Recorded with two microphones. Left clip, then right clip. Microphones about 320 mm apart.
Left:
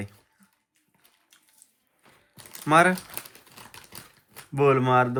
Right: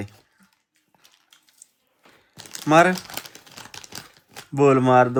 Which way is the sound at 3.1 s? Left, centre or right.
Right.